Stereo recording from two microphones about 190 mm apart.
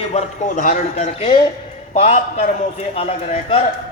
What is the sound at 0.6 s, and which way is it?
A man's voice, 40° left (ahead or behind).